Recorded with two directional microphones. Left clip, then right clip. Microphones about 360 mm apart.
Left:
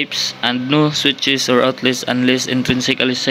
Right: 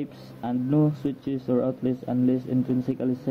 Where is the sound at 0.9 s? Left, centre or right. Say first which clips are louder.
Left 15 dB; centre.